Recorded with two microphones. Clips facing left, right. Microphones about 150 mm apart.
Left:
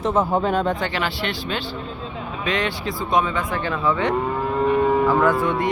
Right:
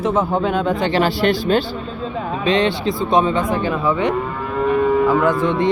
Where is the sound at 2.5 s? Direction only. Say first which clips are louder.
Right 7 dB; 25° right (ahead or behind).